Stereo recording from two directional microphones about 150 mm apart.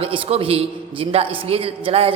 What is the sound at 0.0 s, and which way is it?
A man's voice, 35° right (ahead or behind).